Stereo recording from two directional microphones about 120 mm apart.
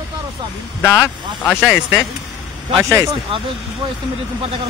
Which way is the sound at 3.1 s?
50° right (ahead or behind).